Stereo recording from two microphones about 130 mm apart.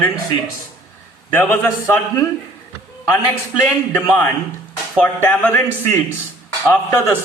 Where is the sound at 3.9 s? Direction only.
15° left (ahead or behind).